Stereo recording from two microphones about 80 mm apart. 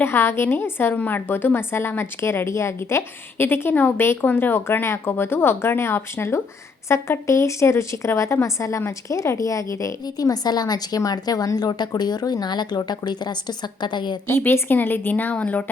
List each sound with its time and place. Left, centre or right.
0.0 s a woman's voice: left
14.3 s a woman's voice: left